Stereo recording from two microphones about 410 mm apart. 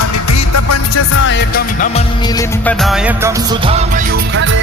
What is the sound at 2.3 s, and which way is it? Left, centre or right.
Music, centre.